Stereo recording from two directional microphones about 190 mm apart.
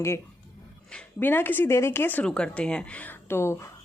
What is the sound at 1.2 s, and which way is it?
A woman's voice, 10° left (ahead or behind).